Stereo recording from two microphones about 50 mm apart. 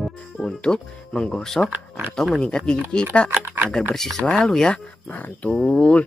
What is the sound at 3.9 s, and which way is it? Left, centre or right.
Speech, centre.